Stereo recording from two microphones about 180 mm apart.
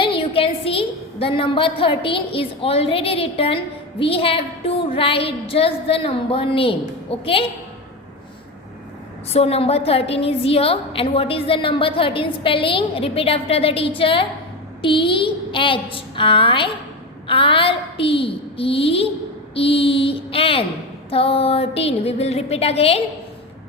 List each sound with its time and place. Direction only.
0.0 s a woman's voice: 30° left (ahead or behind)
9.3 s a woman's voice: 35° left (ahead or behind)